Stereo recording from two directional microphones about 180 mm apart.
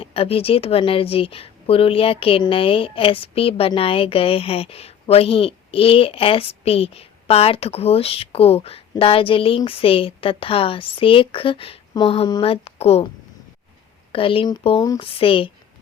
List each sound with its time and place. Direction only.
0.0 s speech: 30° left (ahead or behind)
14.1 s speech: 30° left (ahead or behind)